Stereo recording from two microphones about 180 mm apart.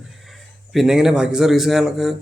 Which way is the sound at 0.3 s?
Centre (ahead or behind).